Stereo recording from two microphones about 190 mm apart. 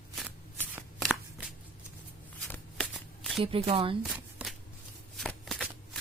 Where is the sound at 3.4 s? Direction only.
30° right (ahead or behind).